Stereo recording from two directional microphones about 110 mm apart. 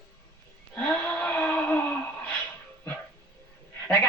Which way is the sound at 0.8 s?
10° left (ahead or behind).